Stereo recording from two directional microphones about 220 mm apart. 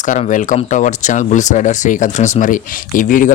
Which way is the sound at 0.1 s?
35° left (ahead or behind).